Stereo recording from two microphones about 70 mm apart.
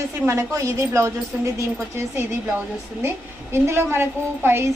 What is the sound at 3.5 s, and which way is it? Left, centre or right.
A woman's voice, right.